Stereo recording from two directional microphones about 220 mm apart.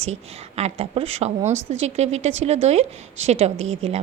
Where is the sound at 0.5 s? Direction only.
30° right (ahead or behind).